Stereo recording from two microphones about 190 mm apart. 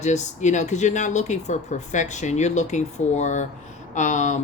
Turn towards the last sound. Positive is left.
turn(degrees=40)  # may be behind; listen again after turning